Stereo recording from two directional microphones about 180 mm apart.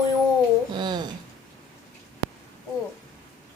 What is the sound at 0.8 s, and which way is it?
Speech, 25° right (ahead or behind).